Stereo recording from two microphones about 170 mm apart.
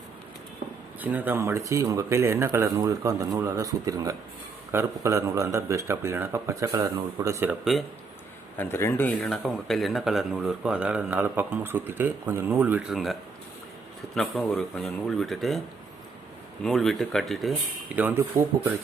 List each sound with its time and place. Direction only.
1.0 s speech: 10° right (ahead or behind)
7.6 s speech: centre (ahead or behind)
8.5 s speech: 15° left (ahead or behind); by 13.1 s centre (ahead or behind)
14.2 s speech: centre (ahead or behind)
16.6 s speech: centre (ahead or behind)
17.9 s speech: 10° right (ahead or behind)